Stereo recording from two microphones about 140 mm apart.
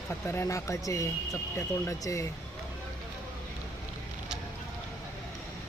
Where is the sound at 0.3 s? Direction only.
20° left (ahead or behind).